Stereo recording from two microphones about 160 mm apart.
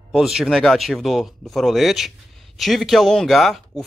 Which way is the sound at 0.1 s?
5° right (ahead or behind).